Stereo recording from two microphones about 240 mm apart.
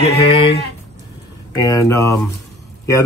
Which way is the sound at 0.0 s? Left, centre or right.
Left.